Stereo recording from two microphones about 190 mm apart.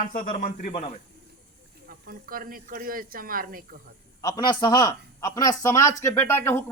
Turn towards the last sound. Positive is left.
turn(degrees=10)  # may be behind; listen again after turning